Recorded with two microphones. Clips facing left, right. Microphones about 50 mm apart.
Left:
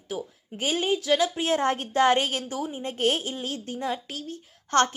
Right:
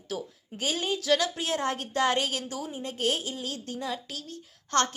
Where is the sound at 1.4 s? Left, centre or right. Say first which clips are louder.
Left 5 dB; left.